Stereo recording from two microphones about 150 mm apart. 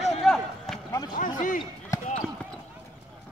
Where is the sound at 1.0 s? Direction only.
60° left (ahead or behind).